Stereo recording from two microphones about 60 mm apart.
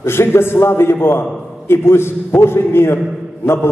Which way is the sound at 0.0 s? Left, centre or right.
Left.